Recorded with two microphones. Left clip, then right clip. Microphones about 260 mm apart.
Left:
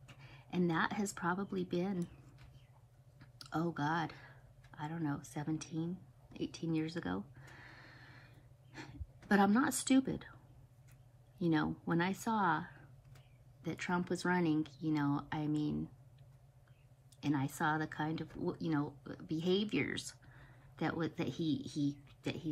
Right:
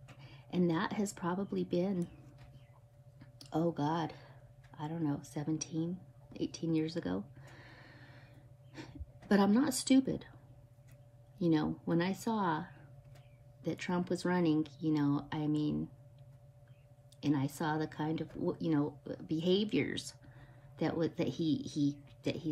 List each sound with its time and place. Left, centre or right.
0.1 s a woman's voice: left
3.7 s speech: left
6.3 s a sound: left
9.3 s speech: centre
11.3 s speech: centre
17.2 s speech: left
21.6 s speech: centre